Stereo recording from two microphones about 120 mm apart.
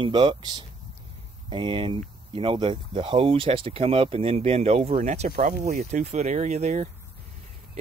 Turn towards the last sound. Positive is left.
turn(degrees=-75)  # may be behind; listen again after turning